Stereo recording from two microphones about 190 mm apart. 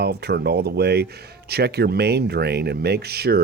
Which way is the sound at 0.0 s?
60° right (ahead or behind).